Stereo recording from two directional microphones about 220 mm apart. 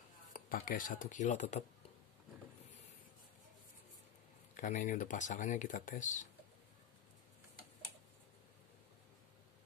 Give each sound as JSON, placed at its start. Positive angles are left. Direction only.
{"t": 0.3, "sound": "speech", "side_deg": 40}
{"t": 4.6, "sound": "speech", "side_deg": 35}